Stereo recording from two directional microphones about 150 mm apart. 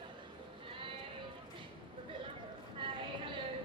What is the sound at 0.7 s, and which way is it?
Sheep, 35° right (ahead or behind).